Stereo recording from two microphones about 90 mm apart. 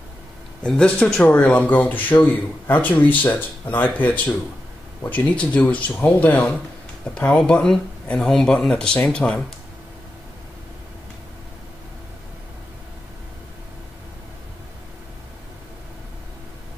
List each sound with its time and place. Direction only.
0.6 s speech: 10° left (ahead or behind)